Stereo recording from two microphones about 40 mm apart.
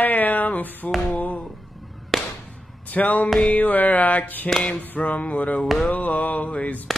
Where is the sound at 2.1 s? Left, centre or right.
Centre.